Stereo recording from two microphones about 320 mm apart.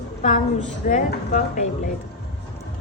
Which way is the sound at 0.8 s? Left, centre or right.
Left.